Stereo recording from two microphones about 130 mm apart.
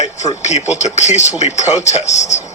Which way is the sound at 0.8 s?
60° left (ahead or behind).